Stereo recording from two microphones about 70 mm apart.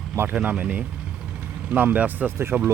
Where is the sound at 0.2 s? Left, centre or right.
Right.